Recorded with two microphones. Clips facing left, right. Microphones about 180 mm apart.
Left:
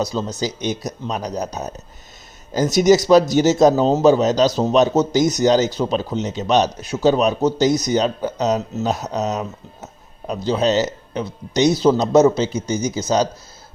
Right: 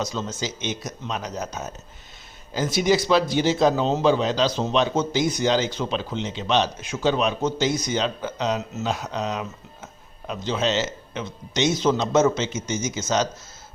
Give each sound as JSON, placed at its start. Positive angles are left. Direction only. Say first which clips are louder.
{"t": 0.0, "sound": "a man's voice", "louder": "left 6 dB", "side_deg": 35}